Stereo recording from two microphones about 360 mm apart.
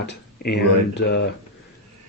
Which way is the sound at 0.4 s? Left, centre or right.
Left.